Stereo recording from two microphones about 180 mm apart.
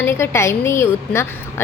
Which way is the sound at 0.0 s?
15° left (ahead or behind).